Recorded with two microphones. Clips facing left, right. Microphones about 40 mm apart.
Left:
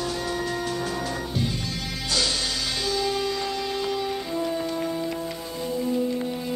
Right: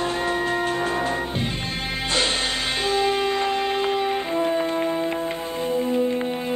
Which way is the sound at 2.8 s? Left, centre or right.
Right.